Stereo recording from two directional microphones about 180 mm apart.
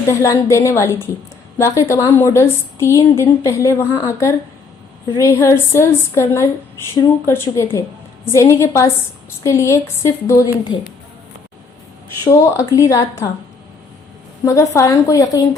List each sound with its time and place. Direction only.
0.1 s a woman's voice: 15° left (ahead or behind)
12.2 s a woman's voice: 20° left (ahead or behind)
14.4 s a woman's voice: 15° left (ahead or behind)